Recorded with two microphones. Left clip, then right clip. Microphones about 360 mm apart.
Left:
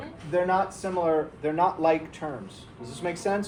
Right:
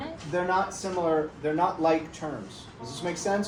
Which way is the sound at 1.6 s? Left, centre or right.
Left.